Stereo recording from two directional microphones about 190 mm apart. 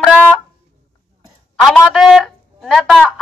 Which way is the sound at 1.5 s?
Centre (ahead or behind).